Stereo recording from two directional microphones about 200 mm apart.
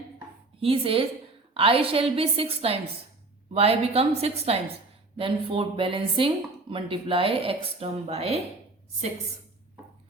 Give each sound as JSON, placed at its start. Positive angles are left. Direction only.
{"t": 0.6, "sound": "a woman's voice", "side_deg": -30}